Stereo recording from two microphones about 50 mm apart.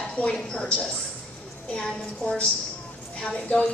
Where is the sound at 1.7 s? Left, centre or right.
Centre.